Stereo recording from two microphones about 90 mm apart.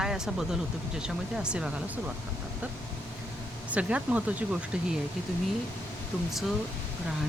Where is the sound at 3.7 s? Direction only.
15° right (ahead or behind).